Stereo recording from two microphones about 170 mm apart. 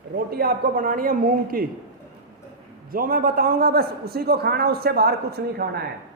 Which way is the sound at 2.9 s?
55° right (ahead or behind).